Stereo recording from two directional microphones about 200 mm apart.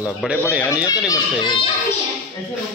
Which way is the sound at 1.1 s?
25° left (ahead or behind).